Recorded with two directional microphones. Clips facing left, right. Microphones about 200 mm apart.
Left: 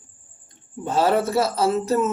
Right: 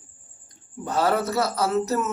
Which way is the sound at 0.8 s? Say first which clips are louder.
Left 3 dB; 25° left (ahead or behind).